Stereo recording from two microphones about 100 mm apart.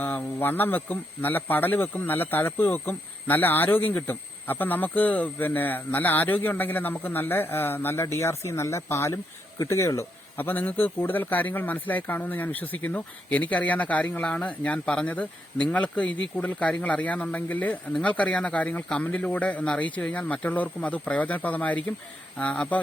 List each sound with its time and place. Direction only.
0.0 s speech: 20° left (ahead or behind)
10.3 s a man's voice: 20° left (ahead or behind)